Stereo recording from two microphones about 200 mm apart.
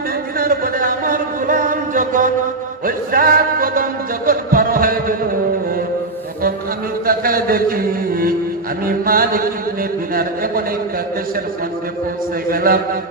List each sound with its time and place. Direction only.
0.3 s a sound: 45° right (ahead or behind)
2.8 s music: 45° right (ahead or behind)
7.0 s music: 45° right (ahead or behind)
12.5 s music: 45° right (ahead or behind)